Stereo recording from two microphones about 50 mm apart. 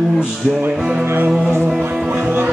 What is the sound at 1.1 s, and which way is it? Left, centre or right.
Music, right.